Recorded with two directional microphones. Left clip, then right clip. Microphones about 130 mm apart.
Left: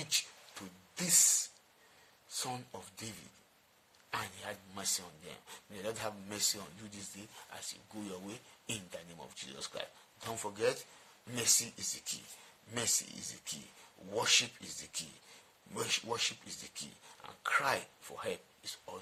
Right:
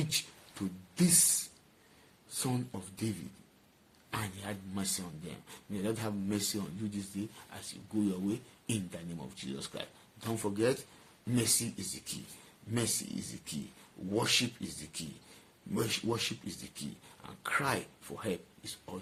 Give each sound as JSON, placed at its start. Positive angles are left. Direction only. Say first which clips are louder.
{"t": 0.0, "sound": "beatboxing", "louder": "even", "side_deg": 15}
{"t": 2.4, "sound": "a man's voice", "louder": "right 4 dB", "side_deg": 15}